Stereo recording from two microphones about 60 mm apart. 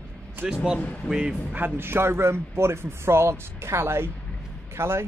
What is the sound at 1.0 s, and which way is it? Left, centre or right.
Speech, centre.